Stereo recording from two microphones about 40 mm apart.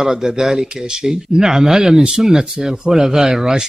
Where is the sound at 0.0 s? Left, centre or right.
Centre.